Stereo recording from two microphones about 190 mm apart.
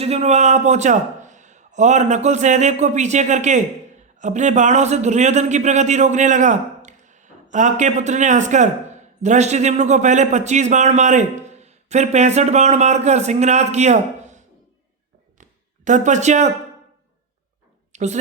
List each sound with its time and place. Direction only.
0.0 s a man's voice: 35° right (ahead or behind)
15.4 s a sound: 40° right (ahead or behind)
17.9 s plop: 35° right (ahead or behind)